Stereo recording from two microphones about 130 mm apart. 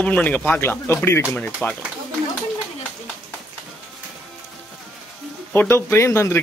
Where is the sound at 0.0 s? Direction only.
10° left (ahead or behind).